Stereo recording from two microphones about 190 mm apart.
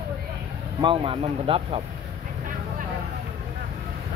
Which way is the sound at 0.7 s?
25° right (ahead or behind).